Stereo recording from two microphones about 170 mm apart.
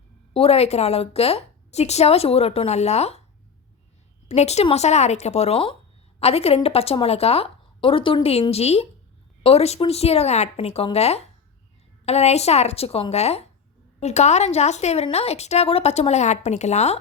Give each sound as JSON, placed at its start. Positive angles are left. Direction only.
{"t": 0.3, "sound": "a woman's voice", "side_deg": 35}
{"t": 4.3, "sound": "a woman's voice", "side_deg": 40}